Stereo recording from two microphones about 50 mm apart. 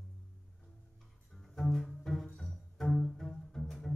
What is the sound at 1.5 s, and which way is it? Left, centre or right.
Bowed string instrument, centre.